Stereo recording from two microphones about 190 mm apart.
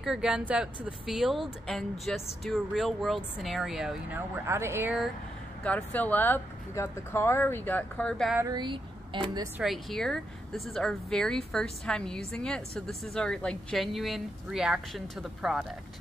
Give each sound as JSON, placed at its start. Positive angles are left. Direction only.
{"t": 0.0, "sound": "speech", "side_deg": -5}
{"t": 4.5, "sound": "speech", "side_deg": -15}
{"t": 5.6, "sound": "speech", "side_deg": 5}
{"t": 8.4, "sound": "speech", "side_deg": -20}
{"t": 9.6, "sound": "speech", "side_deg": 0}